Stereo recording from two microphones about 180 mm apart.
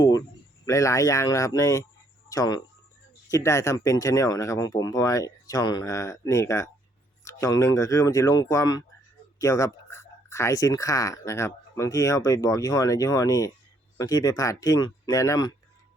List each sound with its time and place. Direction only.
0.0 s speech: 20° left (ahead or behind)